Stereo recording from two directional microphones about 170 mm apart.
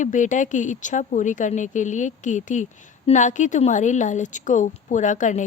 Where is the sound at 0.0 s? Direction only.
50° left (ahead or behind).